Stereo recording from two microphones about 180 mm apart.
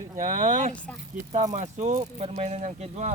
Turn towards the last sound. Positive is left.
turn(degrees=-40)  # may be behind; listen again after turning